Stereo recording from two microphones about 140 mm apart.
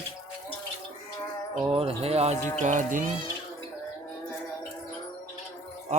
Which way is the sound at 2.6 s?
65° right (ahead or behind).